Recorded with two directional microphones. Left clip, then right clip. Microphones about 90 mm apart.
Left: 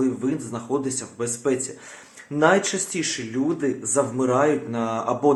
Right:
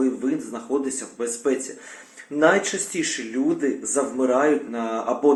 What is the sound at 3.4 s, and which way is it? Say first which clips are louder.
Speech: right 1 dB; 5° left (ahead or behind).